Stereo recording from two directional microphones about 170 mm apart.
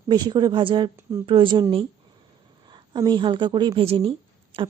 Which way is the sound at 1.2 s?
30° right (ahead or behind).